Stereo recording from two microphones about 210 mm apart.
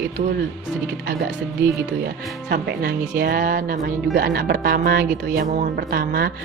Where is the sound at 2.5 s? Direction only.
50° right (ahead or behind).